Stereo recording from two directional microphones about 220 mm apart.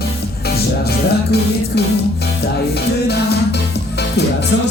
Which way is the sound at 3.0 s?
50° left (ahead or behind).